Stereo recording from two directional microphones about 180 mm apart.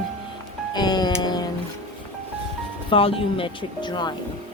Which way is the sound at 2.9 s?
30° left (ahead or behind).